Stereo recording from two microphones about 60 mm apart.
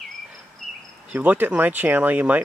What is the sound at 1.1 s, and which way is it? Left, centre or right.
Speech, right.